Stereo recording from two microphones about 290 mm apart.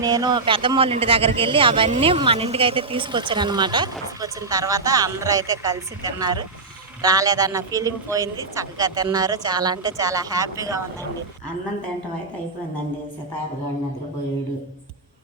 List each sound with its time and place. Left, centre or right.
0.0 s speech: centre